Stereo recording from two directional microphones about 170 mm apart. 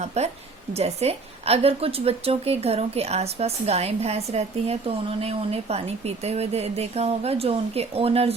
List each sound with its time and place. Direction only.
0.0 s a woman's voice: 40° right (ahead or behind)